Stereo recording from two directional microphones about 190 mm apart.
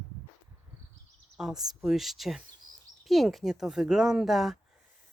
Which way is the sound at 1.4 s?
Centre (ahead or behind).